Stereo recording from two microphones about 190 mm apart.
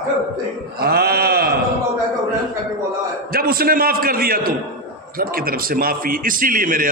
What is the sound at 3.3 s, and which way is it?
A man's voice, 50° right (ahead or behind).